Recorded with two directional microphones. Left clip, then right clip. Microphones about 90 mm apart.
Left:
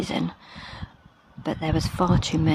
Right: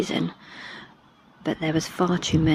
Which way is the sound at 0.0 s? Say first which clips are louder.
Right 2 dB; 35° left (ahead or behind).